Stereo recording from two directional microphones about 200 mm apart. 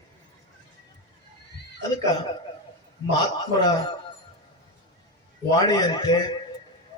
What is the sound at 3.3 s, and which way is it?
Speech, 20° left (ahead or behind).